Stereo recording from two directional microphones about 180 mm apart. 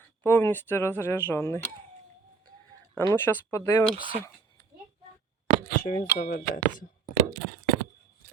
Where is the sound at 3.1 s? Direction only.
15° left (ahead or behind).